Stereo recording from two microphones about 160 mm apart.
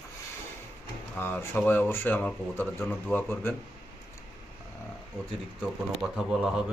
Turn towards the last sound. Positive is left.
turn(degrees=-5)  # may be behind; listen again after turning